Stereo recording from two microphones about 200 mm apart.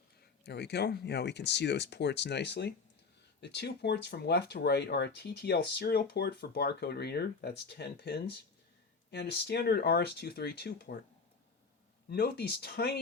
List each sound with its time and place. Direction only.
0.2 s speech: 55° left (ahead or behind)
12.0 s speech: 55° left (ahead or behind)